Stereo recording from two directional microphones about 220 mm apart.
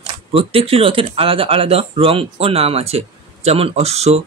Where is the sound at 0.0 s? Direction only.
25° right (ahead or behind).